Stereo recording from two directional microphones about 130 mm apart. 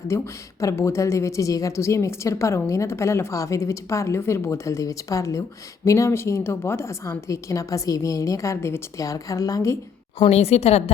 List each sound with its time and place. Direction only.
0.1 s a woman's voice: 20° left (ahead or behind)
10.2 s a woman's voice: 50° left (ahead or behind)